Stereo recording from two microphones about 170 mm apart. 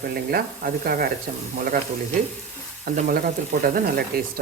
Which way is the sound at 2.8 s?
60° right (ahead or behind).